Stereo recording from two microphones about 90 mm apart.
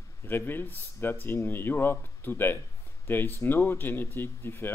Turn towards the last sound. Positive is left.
turn(degrees=25)  # may be behind; listen again after turning